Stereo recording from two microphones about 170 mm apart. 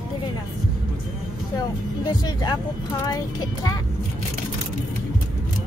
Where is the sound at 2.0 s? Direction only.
25° left (ahead or behind).